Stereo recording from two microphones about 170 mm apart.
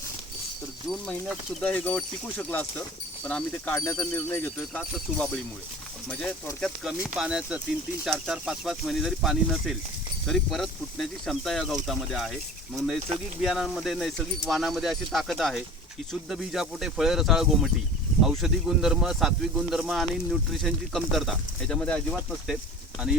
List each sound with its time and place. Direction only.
0.9 s speech: centre (ahead or behind)
6.6 s speech: 5° right (ahead or behind)
13.4 s speech: centre (ahead or behind)